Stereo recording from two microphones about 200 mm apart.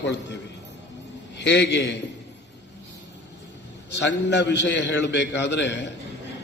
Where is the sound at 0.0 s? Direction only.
65° left (ahead or behind).